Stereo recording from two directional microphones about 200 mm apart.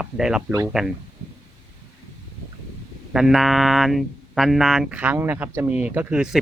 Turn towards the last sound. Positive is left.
turn(degrees=-5)  # may be behind; listen again after turning